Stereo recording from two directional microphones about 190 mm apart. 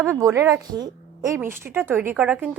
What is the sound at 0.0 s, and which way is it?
A woman's voice, 15° right (ahead or behind).